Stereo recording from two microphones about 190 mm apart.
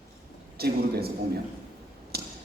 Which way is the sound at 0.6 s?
55° right (ahead or behind).